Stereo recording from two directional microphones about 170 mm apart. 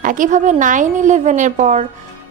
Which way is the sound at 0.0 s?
50° right (ahead or behind).